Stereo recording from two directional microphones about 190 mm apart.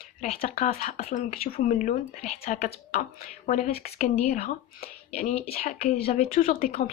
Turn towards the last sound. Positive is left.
turn(degrees=50)  # may be behind; listen again after turning